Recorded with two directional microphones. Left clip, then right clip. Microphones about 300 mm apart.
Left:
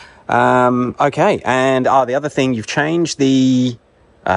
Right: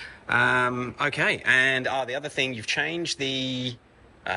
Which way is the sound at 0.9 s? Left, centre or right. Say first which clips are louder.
Left 11 dB; centre.